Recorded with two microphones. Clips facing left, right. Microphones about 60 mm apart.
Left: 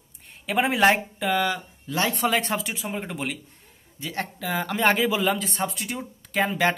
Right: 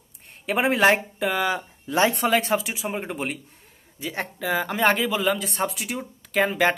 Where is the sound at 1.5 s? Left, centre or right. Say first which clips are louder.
Right 2 dB; centre.